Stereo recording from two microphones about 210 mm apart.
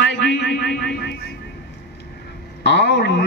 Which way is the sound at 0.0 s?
55° left (ahead or behind).